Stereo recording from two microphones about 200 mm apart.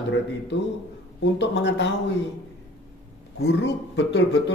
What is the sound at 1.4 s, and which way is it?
Speech, 60° left (ahead or behind).